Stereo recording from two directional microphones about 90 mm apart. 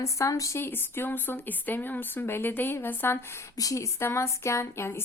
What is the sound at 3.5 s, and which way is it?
A woman's voice, 40° left (ahead or behind).